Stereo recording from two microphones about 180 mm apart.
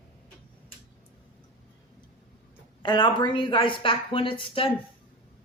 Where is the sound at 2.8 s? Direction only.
25° left (ahead or behind).